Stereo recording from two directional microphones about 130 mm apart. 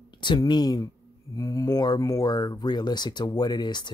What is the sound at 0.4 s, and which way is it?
Speech, 30° left (ahead or behind).